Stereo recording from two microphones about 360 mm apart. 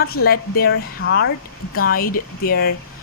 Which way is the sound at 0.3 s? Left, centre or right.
Left.